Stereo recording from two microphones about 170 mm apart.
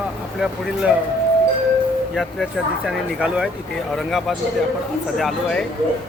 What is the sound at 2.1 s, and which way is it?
Speech, centre (ahead or behind).